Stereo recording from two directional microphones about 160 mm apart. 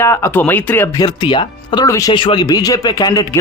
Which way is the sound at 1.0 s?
30° left (ahead or behind).